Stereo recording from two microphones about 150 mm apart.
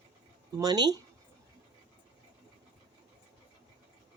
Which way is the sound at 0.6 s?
25° right (ahead or behind).